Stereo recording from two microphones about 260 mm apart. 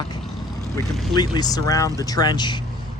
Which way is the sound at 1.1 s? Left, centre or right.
Centre.